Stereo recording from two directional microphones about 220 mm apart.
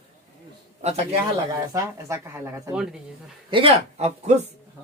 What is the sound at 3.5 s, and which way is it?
Speech, 25° right (ahead or behind).